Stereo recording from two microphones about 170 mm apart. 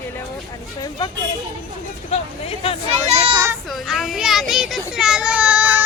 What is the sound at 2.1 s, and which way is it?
Speech, 35° left (ahead or behind).